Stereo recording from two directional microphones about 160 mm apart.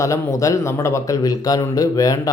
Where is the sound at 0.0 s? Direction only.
20° left (ahead or behind).